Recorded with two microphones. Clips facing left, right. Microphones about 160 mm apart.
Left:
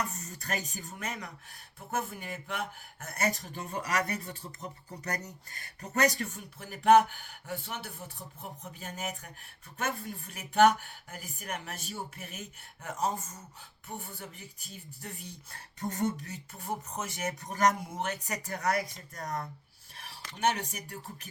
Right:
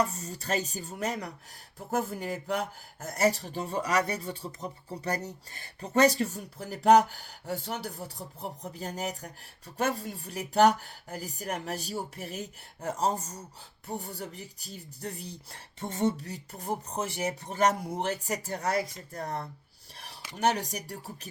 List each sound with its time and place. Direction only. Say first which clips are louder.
0.0 s speech: right 7 dB; 30° right (ahead or behind)
20.7 s speech: right 5 dB; 35° right (ahead or behind)